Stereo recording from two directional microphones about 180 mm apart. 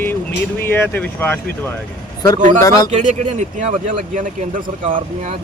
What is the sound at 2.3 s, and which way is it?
Speech, 45° right (ahead or behind).